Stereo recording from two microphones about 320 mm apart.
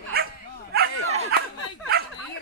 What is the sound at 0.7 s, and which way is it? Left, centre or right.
Bow-wow, right.